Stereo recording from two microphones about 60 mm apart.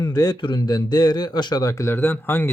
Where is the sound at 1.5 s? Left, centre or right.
Left.